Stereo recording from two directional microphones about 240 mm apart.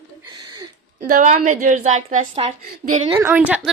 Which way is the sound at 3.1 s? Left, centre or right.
Centre.